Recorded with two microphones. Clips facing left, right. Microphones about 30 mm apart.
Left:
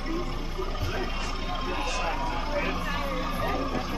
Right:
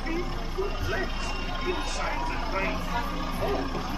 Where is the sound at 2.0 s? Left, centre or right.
Centre.